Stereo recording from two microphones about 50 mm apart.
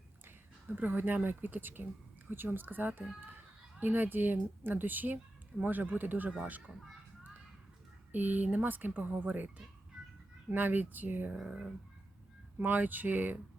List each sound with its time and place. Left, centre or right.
0.3 s a woman's voice: right
8.1 s speech: right
10.5 s speech: right
12.5 s speech: right